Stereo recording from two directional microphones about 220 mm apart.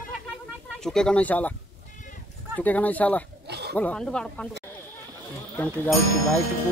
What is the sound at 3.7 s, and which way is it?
Speech, 5° left (ahead or behind).